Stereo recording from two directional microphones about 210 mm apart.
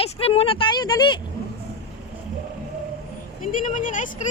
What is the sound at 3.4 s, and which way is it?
Speech, 35° left (ahead or behind).